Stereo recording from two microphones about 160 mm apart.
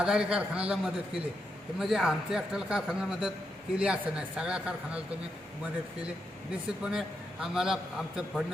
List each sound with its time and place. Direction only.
0.0 s a man's voice: 5° right (ahead or behind)
6.5 s a man's voice: 5° right (ahead or behind)